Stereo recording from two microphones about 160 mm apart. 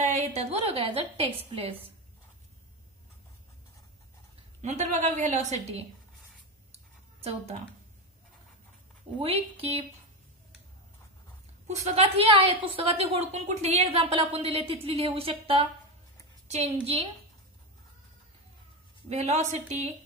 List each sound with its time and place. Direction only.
0.0 s a woman's voice: 45° right (ahead or behind)
4.6 s a woman's voice: 45° right (ahead or behind)
6.7 s a sound: 40° right (ahead or behind)
9.2 s a woman's voice: 35° right (ahead or behind)
11.6 s a woman's voice: 45° right (ahead or behind)
19.0 s a woman's voice: 45° right (ahead or behind)